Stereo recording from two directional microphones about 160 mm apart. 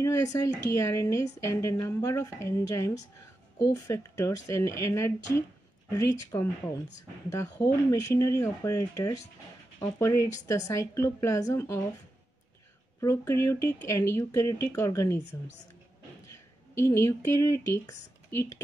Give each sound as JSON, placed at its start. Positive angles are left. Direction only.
{"t": 0.0, "sound": "speech", "side_deg": 20}
{"t": 13.0, "sound": "speech", "side_deg": 20}
{"t": 16.7, "sound": "speech", "side_deg": 15}